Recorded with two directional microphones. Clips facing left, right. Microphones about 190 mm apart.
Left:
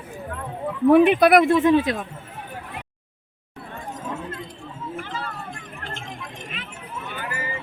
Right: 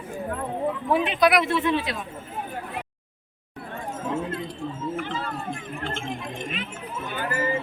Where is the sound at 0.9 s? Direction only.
60° left (ahead or behind).